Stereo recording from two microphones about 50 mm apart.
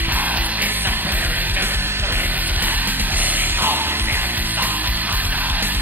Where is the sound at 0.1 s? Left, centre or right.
Right.